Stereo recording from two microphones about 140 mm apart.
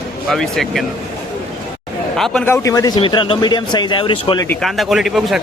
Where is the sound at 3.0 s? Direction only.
35° left (ahead or behind).